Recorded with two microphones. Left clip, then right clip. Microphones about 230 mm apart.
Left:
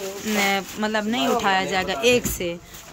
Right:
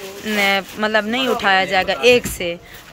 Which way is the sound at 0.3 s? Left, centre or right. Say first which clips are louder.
Right 5 dB; centre.